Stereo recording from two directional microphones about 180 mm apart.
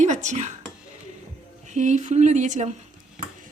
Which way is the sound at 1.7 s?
40° right (ahead or behind).